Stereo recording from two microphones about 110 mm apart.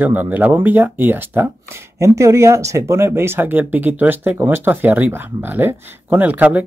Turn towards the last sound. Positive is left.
turn(degrees=-15)  # may be behind; listen again after turning